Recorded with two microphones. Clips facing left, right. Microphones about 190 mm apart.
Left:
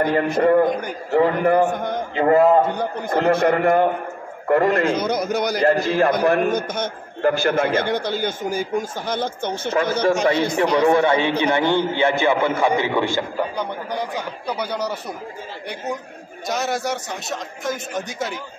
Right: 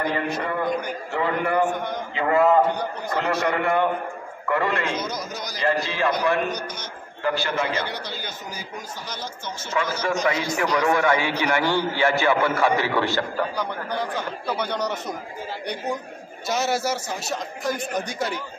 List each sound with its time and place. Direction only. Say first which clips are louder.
0.0 s a man's voice: left 8 dB; 50° left (ahead or behind)
10.5 s a man's voice: left 4 dB; 30° left (ahead or behind); by 15.1 s 10° left (ahead or behind)
16.4 s a man's voice: even; centre (ahead or behind)